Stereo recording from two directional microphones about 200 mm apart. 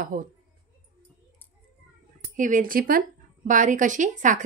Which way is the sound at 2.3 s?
40° right (ahead or behind).